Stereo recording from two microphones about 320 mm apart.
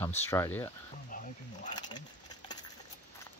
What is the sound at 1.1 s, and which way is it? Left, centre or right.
Speech, left.